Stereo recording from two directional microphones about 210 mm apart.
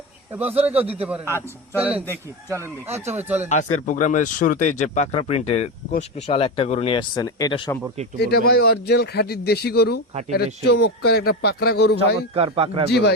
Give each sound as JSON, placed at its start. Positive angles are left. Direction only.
{"t": 0.6, "sound": "a man's voice", "side_deg": -5}
{"t": 3.5, "sound": "speech", "side_deg": 35}
{"t": 8.2, "sound": "speech", "side_deg": 50}
{"t": 12.3, "sound": "a man's voice", "side_deg": -30}
{"t": 12.9, "sound": "speech", "side_deg": 50}